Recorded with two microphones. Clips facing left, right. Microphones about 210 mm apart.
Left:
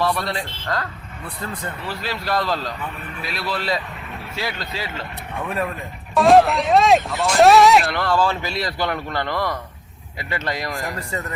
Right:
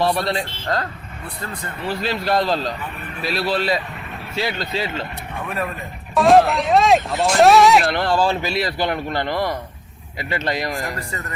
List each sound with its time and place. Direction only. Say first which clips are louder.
0.0 s a man's voice: right 3 dB; 30° right (ahead or behind)
1.9 s a man's voice: right 5 dB; 20° right (ahead or behind)
6.1 s speech: even; centre (ahead or behind)
7.9 s a man's voice: right 2 dB; 25° right (ahead or behind)
8.6 s a man's voice: right 2 dB; 20° right (ahead or behind)